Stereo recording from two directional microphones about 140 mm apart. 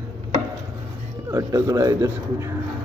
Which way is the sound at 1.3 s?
25° right (ahead or behind).